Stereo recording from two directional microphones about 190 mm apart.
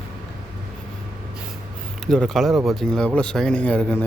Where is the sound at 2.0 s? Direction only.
5° left (ahead or behind).